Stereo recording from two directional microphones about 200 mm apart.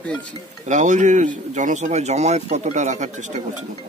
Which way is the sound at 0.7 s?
40° right (ahead or behind).